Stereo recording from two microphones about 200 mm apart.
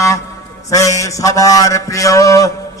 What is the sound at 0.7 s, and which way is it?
Mantra, 15° left (ahead or behind).